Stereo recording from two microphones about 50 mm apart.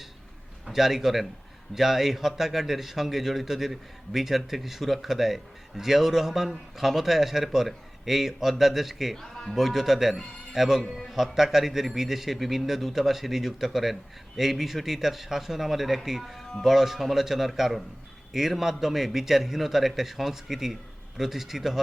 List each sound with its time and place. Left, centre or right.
0.7 s a man's voice: centre
9.1 s speech: centre
9.6 s a man's voice: centre